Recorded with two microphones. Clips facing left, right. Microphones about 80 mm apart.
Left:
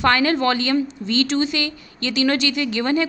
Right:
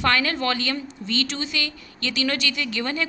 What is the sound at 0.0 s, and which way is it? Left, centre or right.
Speech, left.